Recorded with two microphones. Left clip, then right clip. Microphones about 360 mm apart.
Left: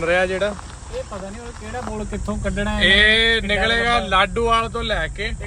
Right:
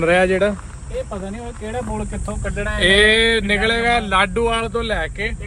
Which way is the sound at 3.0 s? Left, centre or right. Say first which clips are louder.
Right 1 dB; centre.